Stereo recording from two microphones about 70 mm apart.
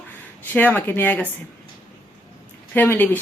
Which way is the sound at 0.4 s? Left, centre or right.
Left.